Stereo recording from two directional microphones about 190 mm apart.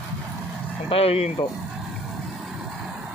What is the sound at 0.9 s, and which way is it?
Speech, 30° left (ahead or behind).